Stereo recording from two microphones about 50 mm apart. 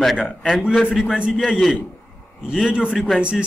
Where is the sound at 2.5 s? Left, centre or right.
Centre.